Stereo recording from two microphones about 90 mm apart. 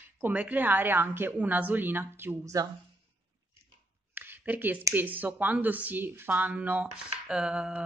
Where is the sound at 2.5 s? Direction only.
40° right (ahead or behind).